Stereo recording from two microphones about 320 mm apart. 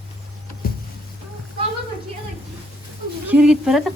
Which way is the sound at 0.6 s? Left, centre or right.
Left.